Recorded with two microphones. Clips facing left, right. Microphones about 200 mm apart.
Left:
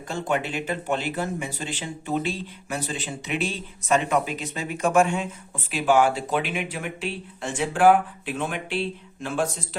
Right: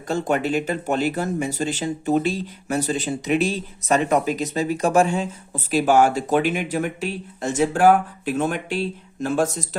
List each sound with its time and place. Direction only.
0.1 s speech: 40° right (ahead or behind)